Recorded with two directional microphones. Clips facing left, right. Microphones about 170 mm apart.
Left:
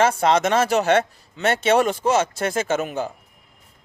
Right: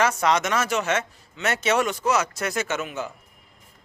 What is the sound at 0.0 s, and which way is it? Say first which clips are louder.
Speech: left 4 dB; 30° left (ahead or behind).